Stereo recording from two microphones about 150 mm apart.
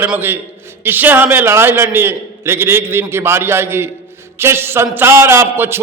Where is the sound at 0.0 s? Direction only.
15° right (ahead or behind).